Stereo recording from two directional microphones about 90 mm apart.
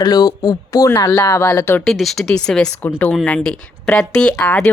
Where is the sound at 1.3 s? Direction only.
30° left (ahead or behind).